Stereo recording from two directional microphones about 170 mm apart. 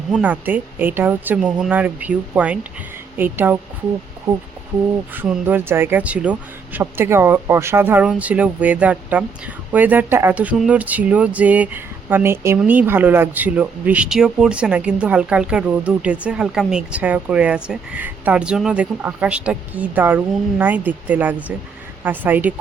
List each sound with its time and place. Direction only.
0.1 s speech: 10° right (ahead or behind)
5.1 s speech: 10° right (ahead or behind)